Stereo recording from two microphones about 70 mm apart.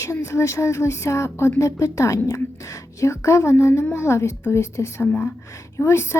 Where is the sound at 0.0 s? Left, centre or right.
Left.